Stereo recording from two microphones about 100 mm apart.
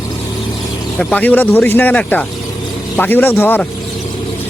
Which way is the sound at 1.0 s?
15° left (ahead or behind).